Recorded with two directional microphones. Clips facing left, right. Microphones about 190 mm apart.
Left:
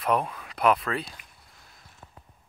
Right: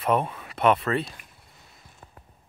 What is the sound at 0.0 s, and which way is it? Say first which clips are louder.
Speech: right 2 dB; centre (ahead or behind).